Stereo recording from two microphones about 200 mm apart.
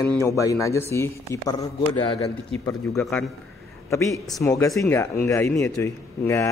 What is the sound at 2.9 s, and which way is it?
Speech, centre (ahead or behind).